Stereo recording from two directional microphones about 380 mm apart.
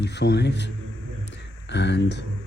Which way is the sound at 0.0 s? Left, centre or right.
Left.